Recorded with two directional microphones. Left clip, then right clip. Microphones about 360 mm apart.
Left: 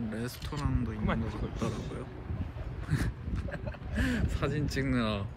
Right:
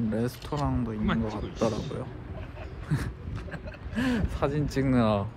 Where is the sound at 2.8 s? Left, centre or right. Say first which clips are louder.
Right 1 dB; centre.